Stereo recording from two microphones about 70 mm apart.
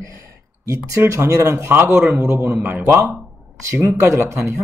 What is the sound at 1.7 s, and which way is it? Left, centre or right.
A man's voice, right.